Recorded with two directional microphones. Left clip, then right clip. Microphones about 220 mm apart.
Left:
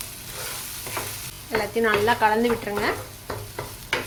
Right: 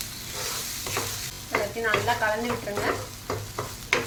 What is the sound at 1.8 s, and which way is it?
Speech, 50° left (ahead or behind).